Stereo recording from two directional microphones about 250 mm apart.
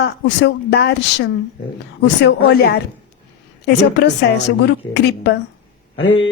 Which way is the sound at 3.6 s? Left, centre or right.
Left.